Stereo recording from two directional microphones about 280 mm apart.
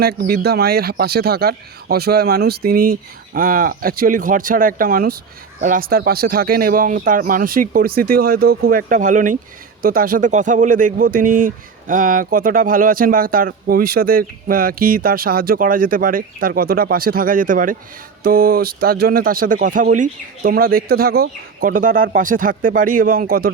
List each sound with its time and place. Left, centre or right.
0.0 s speech: right